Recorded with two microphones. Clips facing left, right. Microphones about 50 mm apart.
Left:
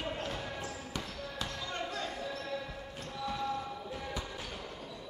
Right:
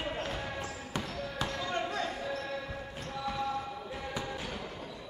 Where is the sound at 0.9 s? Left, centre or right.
Right.